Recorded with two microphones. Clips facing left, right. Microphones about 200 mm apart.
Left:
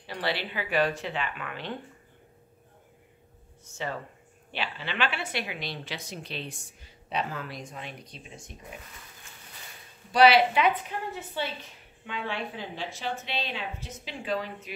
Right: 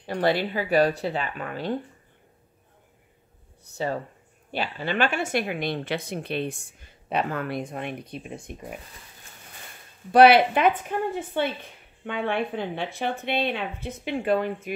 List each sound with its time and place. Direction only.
0.0 s speech: 50° right (ahead or behind)
3.7 s speech: 35° right (ahead or behind); by 8.7 s 55° right (ahead or behind)
10.1 s a woman's voice: 55° right (ahead or behind)